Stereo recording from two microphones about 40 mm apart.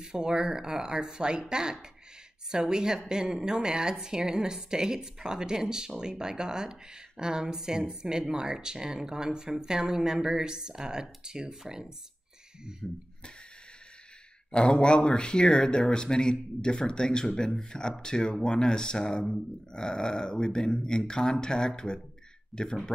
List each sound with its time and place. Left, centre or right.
0.0 s a woman's voice: centre
12.8 s speech: centre
14.5 s speech: left